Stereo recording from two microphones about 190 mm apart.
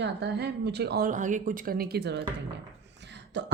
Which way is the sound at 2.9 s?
65° right (ahead or behind).